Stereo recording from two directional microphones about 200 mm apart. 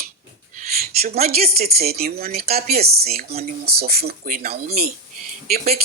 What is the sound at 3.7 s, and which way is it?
Speech, 50° right (ahead or behind).